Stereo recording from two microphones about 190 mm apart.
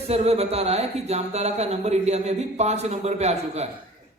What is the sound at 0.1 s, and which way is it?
Speech, 35° right (ahead or behind).